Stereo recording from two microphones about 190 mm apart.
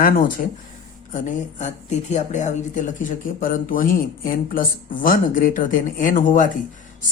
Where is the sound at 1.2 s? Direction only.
40° left (ahead or behind).